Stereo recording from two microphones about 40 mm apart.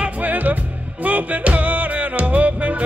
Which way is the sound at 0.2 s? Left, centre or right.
Right.